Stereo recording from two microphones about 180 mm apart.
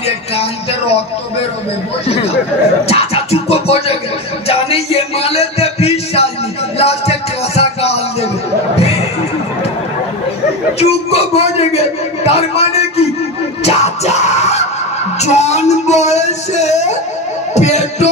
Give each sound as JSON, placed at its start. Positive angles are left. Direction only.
{"t": 0.0, "sound": "speech", "side_deg": 35}
{"t": 2.8, "sound": "speech", "side_deg": 35}
{"t": 4.5, "sound": "a sound", "side_deg": 35}
{"t": 6.8, "sound": "music", "side_deg": 35}
{"t": 10.8, "sound": "a man's voice", "side_deg": 35}
{"t": 13.7, "sound": "music", "side_deg": 35}
{"t": 15.1, "sound": "speech", "side_deg": 40}